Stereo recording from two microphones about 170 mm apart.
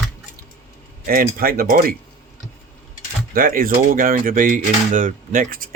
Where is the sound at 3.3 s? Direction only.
55° right (ahead or behind).